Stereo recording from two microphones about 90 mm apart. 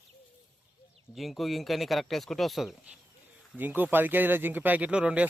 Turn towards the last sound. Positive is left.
turn(degrees=-15)  # may be behind; listen again after turning